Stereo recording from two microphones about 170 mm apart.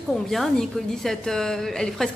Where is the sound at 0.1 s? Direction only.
Centre (ahead or behind).